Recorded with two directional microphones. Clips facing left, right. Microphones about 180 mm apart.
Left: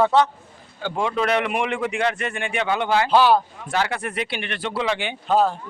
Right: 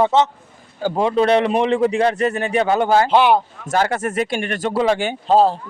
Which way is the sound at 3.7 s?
45° right (ahead or behind).